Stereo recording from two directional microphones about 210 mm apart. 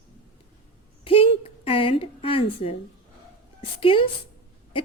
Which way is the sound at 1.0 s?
25° left (ahead or behind).